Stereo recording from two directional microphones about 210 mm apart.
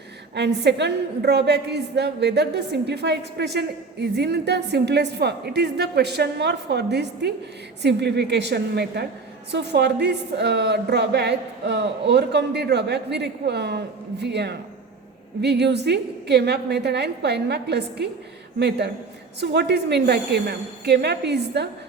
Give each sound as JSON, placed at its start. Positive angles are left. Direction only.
{"t": 0.3, "sound": "a woman's voice", "side_deg": -55}
{"t": 19.4, "sound": "a woman's voice", "side_deg": -50}